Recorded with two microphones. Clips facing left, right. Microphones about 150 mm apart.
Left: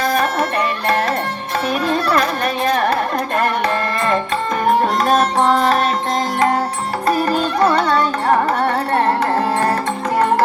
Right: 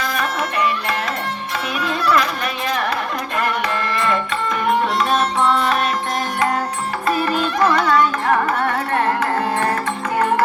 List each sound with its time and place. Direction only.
0.0 s music: 40° left (ahead or behind)
1.8 s carnatic music: 40° left (ahead or behind)
4.6 s music: 40° left (ahead or behind)
7.1 s carnatic music: 40° left (ahead or behind)